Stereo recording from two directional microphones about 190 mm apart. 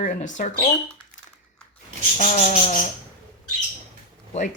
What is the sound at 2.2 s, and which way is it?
Insect, 40° left (ahead or behind).